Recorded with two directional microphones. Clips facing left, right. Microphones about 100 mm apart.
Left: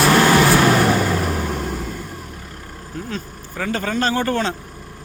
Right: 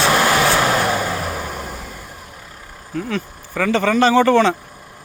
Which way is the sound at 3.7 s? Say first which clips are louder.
Right 7 dB; 90° right.